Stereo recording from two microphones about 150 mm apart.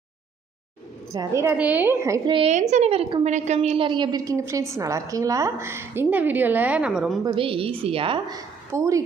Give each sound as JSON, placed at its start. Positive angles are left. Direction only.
{"t": 1.1, "sound": "a woman's voice", "side_deg": -20}
{"t": 2.5, "sound": "a woman's voice", "side_deg": -50}
{"t": 7.3, "sound": "a woman's voice", "side_deg": -35}